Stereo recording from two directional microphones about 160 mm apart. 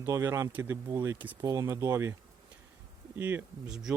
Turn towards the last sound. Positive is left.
turn(degrees=-5)  # may be behind; listen again after turning